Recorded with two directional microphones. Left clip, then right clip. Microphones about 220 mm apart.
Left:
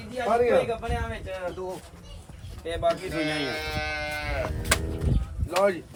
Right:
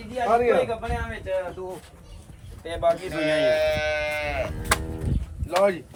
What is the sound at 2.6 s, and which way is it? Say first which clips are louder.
Speech: right 3 dB; 15° right (ahead or behind).